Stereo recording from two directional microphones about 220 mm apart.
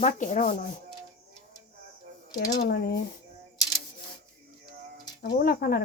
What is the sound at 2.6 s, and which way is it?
Speech, 45° left (ahead or behind).